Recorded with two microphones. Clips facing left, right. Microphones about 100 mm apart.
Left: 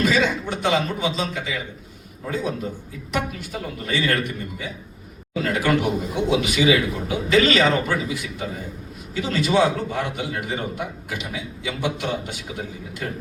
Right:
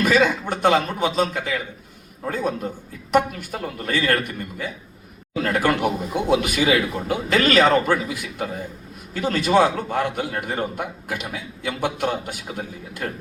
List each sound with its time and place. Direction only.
0.0 s a man's voice: 50° right (ahead or behind)